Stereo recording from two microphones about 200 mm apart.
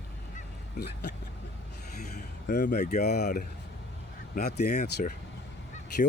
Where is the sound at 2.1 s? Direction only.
40° left (ahead or behind).